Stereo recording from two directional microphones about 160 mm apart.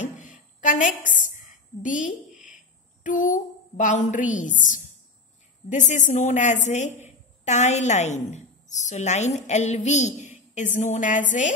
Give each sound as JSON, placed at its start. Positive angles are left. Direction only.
{"t": 0.6, "sound": "a woman's voice", "side_deg": 50}